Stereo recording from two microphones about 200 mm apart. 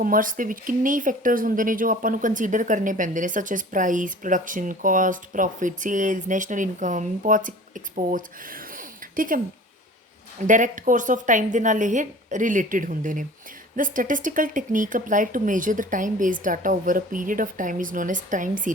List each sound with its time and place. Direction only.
0.0 s speech: 40° right (ahead or behind)
10.4 s speech: 40° right (ahead or behind)